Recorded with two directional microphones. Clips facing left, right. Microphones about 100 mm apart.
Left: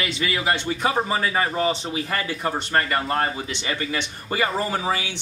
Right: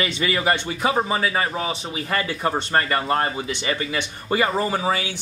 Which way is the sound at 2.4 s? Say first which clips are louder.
Right 1 dB; 30° right (ahead or behind).